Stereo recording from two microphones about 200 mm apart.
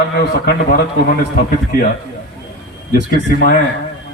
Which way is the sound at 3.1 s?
45° left (ahead or behind).